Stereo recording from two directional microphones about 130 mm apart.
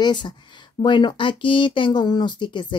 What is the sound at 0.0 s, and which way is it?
Speech, 35° left (ahead or behind).